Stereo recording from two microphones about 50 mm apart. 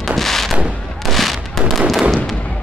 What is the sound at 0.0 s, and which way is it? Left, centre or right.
Artillery fire, centre.